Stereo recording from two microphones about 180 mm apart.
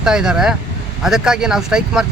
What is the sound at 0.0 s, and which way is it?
Speech, 5° right (ahead or behind).